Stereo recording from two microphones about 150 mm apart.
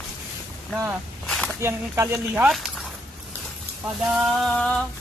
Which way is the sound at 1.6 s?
15° right (ahead or behind).